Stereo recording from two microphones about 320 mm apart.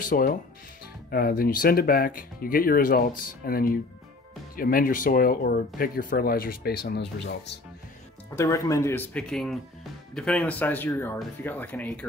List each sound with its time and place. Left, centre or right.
0.1 s speech: left
8.4 s speech: centre